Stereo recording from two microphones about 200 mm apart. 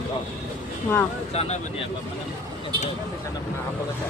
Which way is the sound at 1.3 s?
30° left (ahead or behind).